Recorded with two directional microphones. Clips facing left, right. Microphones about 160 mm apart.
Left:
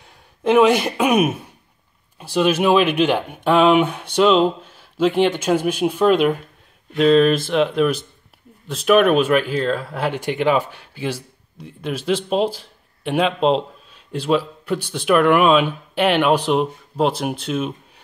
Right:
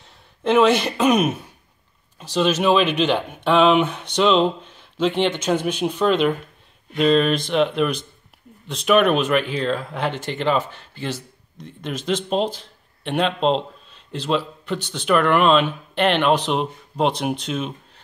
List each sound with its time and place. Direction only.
0.4 s speech: 10° left (ahead or behind)